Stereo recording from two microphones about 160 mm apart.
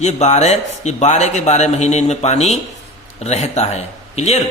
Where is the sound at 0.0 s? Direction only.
45° left (ahead or behind).